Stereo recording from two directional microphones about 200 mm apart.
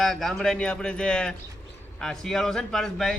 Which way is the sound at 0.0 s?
Centre (ahead or behind).